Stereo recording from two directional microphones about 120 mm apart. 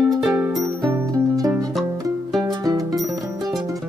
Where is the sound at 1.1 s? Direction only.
30° right (ahead or behind).